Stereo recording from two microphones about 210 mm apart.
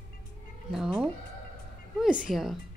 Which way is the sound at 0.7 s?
5° right (ahead or behind).